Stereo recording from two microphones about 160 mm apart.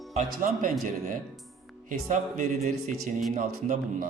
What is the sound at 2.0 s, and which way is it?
Speech, 50° right (ahead or behind).